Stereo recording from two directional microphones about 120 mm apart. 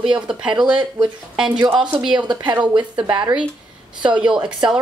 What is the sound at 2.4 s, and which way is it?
Speech, 15° right (ahead or behind).